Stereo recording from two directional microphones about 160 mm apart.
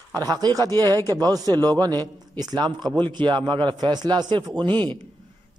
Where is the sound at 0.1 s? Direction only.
20° right (ahead or behind).